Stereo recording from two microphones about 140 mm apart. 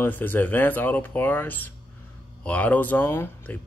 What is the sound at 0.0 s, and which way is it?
Speech, 15° left (ahead or behind).